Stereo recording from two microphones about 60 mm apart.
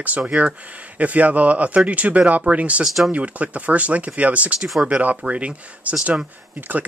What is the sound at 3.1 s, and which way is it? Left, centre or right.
Speech, right.